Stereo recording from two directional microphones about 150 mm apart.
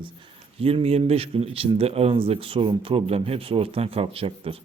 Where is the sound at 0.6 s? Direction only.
40° right (ahead or behind).